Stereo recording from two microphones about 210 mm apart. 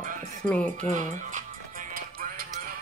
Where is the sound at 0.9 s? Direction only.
35° right (ahead or behind).